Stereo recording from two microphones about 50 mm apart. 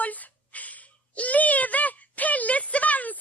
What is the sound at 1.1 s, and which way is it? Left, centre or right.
Speech, left.